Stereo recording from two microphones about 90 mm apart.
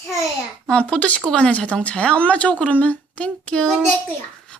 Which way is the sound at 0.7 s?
10° left (ahead or behind).